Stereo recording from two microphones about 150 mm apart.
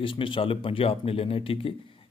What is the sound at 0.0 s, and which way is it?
Speech, 35° left (ahead or behind).